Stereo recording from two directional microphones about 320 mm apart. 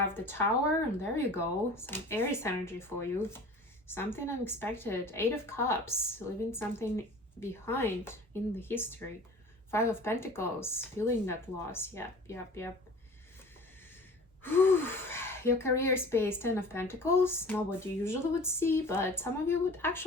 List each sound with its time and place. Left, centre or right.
0.1 s speech: centre
14.4 s speech: centre